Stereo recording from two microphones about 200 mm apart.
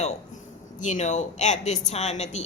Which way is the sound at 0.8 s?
35° left (ahead or behind).